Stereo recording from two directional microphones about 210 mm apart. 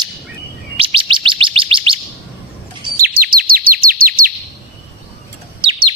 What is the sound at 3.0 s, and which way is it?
Chirp, 45° right (ahead or behind).